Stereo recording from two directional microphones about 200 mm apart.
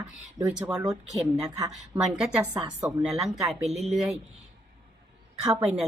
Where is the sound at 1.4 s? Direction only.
15° right (ahead or behind).